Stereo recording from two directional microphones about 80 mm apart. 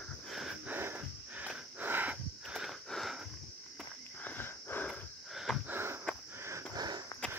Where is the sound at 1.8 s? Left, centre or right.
Right.